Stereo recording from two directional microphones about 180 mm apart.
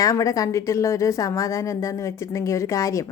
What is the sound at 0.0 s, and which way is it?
Speech, 15° left (ahead or behind).